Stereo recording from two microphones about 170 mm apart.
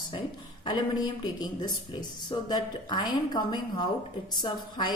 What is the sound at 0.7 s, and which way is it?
Speech, 25° left (ahead or behind).